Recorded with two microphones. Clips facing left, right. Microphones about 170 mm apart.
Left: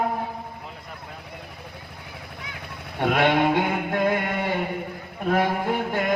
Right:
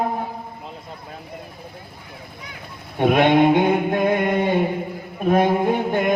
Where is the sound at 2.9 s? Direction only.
20° right (ahead or behind).